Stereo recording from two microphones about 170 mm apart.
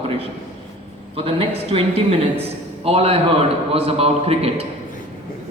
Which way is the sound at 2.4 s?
35° right (ahead or behind).